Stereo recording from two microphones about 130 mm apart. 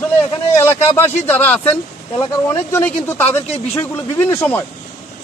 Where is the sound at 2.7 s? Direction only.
15° left (ahead or behind).